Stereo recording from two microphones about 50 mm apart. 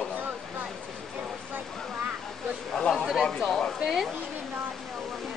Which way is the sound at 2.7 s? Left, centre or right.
Centre.